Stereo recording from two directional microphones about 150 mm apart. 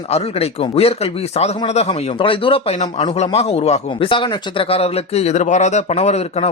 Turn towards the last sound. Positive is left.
turn(degrees=45)  # may be behind; listen again after turning